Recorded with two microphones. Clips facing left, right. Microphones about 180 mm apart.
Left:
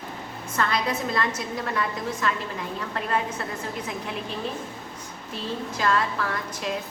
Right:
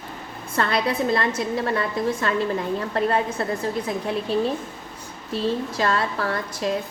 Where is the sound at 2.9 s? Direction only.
35° right (ahead or behind).